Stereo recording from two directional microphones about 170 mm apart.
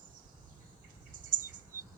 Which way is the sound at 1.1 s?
50° right (ahead or behind).